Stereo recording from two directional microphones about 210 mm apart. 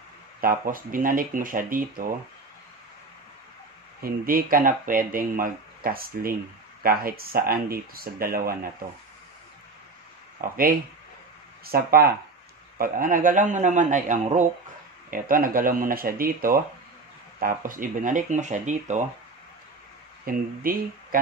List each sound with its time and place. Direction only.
0.4 s a man's voice: 40° right (ahead or behind)
4.0 s speech: 45° right (ahead or behind)
10.4 s a man's voice: 45° right (ahead or behind)
20.2 s speech: 45° right (ahead or behind)